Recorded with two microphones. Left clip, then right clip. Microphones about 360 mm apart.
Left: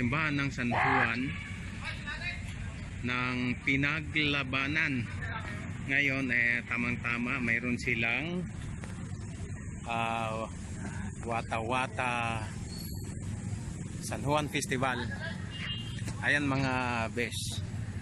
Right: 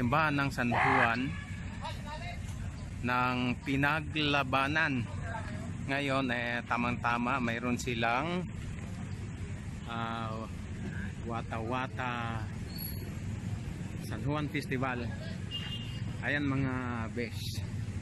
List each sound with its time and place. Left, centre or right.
0.1 s speech: centre
3.1 s a man's voice: centre
5.9 s speech: right
6.5 s a man's voice: centre
7.4 s speech: right
7.7 s a man's voice: centre
8.0 s speech: right
9.8 s speech: centre
14.1 s speech: centre
16.2 s speech: centre